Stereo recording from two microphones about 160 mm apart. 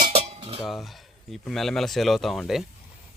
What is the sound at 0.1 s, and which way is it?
Cutlery, 40° right (ahead or behind).